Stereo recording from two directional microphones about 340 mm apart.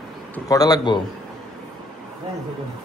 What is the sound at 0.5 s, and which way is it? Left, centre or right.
Speech, centre.